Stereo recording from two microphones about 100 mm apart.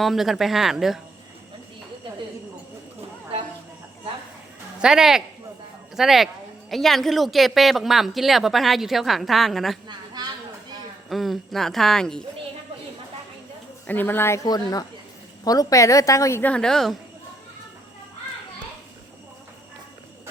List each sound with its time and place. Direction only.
0.0 s speech: centre (ahead or behind)
4.8 s speech: 5° right (ahead or behind)
9.9 s a sound: 45° right (ahead or behind)
11.1 s speech: centre (ahead or behind)
13.8 s a woman's voice: 20° left (ahead or behind)
14.4 s a woman's voice: 40° left (ahead or behind)
16.4 s speech: 10° left (ahead or behind)